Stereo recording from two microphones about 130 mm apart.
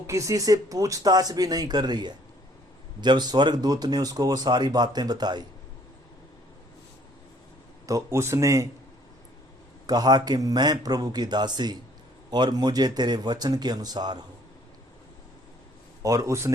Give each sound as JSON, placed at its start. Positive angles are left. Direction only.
{"t": 0.1, "sound": "speech", "side_deg": -25}
{"t": 7.9, "sound": "speech", "side_deg": -25}
{"t": 9.8, "sound": "speech", "side_deg": -30}
{"t": 16.0, "sound": "speech", "side_deg": -25}